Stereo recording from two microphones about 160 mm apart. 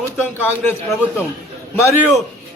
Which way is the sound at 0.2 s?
15° left (ahead or behind).